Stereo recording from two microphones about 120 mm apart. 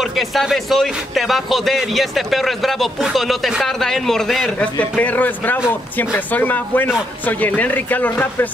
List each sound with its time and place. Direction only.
0.0 s speech: centre (ahead or behind); by 8.5 s 15° left (ahead or behind)